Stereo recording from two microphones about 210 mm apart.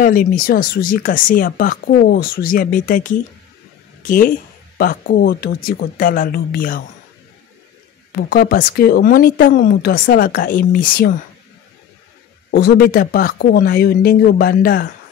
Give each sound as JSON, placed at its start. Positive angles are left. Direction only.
{"t": 0.0, "sound": "speech", "side_deg": 40}
{"t": 4.0, "sound": "speech", "side_deg": 40}
{"t": 8.2, "sound": "speech", "side_deg": 50}
{"t": 12.4, "sound": "speech", "side_deg": 45}